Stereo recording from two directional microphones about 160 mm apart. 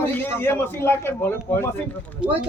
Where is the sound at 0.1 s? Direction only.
15° left (ahead or behind).